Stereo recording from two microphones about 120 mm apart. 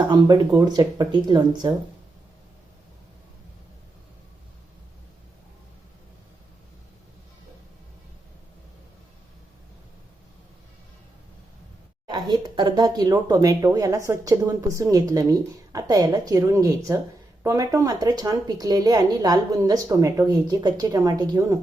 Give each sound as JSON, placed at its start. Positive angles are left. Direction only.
{"t": 0.0, "sound": "speech", "side_deg": -40}
{"t": 12.0, "sound": "speech", "side_deg": -35}